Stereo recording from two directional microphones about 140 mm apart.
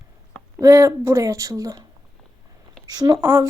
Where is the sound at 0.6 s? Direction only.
20° right (ahead or behind).